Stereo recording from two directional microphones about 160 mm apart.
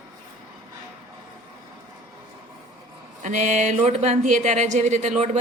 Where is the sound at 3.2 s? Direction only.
50° right (ahead or behind).